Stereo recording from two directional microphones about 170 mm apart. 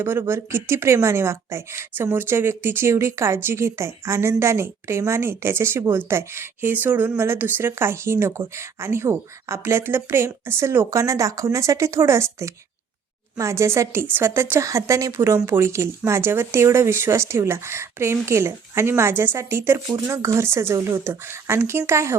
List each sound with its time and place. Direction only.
0.0 s speech: 15° right (ahead or behind)